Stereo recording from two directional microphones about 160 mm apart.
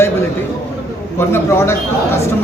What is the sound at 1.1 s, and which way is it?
Speech, 15° left (ahead or behind).